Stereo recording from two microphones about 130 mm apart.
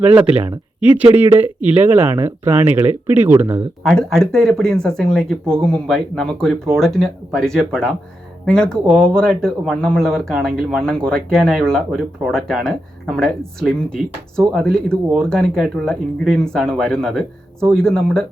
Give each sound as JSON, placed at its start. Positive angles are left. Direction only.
{"t": 0.0, "sound": "speech", "side_deg": -10}
{"t": 3.8, "sound": "speech", "side_deg": 5}